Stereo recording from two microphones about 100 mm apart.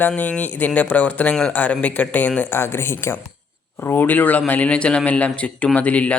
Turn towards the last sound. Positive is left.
turn(degrees=15)  # may be behind; listen again after turning